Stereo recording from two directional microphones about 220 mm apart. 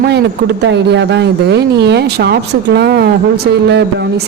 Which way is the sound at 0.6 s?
50° right (ahead or behind).